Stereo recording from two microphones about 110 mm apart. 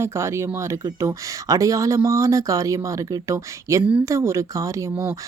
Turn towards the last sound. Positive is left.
turn(degrees=-25)  # may be behind; listen again after turning